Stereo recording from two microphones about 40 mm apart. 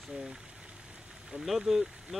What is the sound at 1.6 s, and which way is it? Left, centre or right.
Speech, centre.